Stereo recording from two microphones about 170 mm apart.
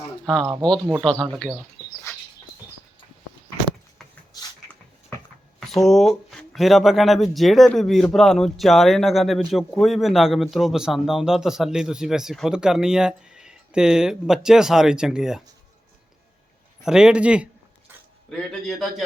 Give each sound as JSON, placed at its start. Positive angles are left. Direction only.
{"t": 0.6, "sound": "a man's voice", "side_deg": 5}
{"t": 2.1, "sound": "bird", "side_deg": 15}
{"t": 5.5, "sound": "a man's voice", "side_deg": 0}
{"t": 16.8, "sound": "a sound", "side_deg": -5}
{"t": 18.3, "sound": "a man's voice", "side_deg": 0}